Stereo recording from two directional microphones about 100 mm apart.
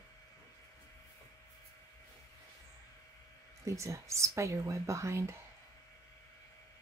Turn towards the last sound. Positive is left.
turn(degrees=-30)  # may be behind; listen again after turning